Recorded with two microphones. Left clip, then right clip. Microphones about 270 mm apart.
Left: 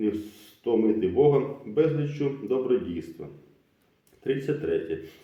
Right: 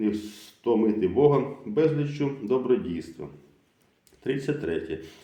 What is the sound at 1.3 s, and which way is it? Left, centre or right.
Speech, right.